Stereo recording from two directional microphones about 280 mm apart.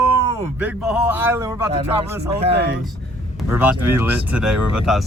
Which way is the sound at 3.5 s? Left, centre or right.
Centre.